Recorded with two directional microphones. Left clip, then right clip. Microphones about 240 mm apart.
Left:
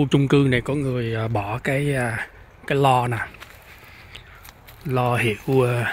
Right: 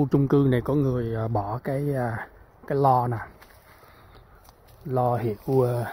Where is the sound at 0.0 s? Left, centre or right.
Centre.